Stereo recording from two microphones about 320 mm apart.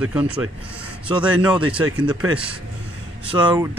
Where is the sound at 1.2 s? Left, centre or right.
Centre.